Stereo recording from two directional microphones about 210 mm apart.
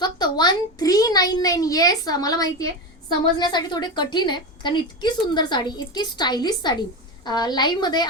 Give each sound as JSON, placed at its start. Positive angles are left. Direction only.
{"t": 0.0, "sound": "a child's voice", "side_deg": 20}